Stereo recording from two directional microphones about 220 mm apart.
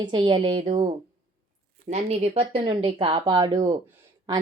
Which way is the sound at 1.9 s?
25° right (ahead or behind).